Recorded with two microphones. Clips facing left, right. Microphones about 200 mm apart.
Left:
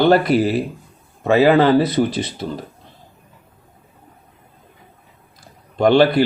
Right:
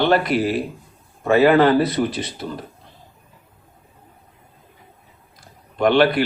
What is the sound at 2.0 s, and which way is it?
Speech, 40° left (ahead or behind).